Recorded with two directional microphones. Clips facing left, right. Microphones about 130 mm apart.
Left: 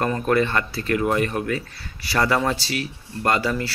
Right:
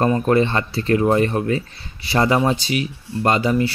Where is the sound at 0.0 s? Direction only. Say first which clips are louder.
Right 4 dB; 25° right (ahead or behind).